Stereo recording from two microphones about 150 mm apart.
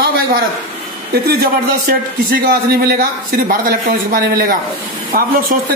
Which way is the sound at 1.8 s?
70° right (ahead or behind).